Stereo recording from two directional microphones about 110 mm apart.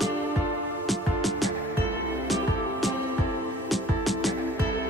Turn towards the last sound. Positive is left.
turn(degrees=0)  # may be behind; listen again after turning